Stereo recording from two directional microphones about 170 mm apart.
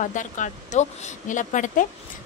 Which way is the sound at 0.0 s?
50° left (ahead or behind).